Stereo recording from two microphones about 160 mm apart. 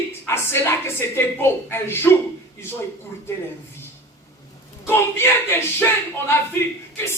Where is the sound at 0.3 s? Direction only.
15° left (ahead or behind).